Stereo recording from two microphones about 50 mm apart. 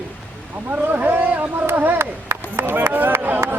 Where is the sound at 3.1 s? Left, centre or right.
Right.